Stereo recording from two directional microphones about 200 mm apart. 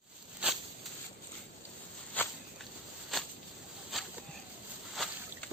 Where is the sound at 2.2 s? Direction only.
10° left (ahead or behind).